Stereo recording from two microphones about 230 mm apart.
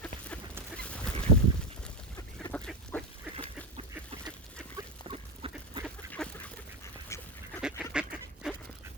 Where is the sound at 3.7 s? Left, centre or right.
Right.